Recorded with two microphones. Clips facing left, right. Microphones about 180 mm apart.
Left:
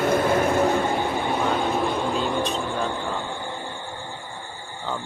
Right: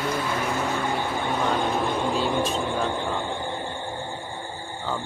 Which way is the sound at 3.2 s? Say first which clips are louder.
Right 2 dB; 20° right (ahead or behind).